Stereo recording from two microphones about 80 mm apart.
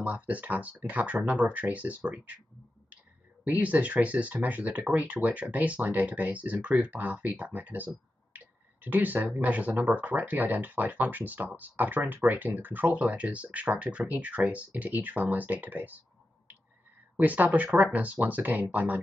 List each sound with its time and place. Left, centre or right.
0.0 s speech: centre
3.4 s speech: centre
17.2 s speech: centre